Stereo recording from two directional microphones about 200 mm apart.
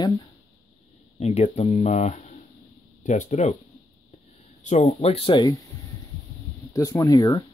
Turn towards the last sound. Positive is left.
turn(degrees=20)  # may be behind; listen again after turning